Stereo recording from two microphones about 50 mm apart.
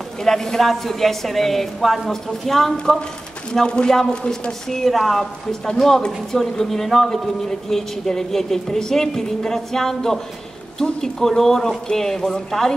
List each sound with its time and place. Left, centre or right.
0.2 s a woman's voice: centre
3.5 s a man's voice: centre